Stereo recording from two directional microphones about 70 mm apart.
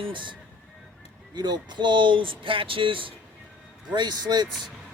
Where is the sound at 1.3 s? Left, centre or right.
Right.